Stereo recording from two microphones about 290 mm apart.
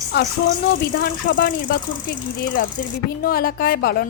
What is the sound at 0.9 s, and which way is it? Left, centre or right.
A woman's voice, left.